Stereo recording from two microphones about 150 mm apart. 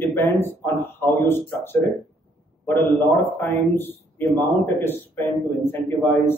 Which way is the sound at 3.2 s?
15° left (ahead or behind).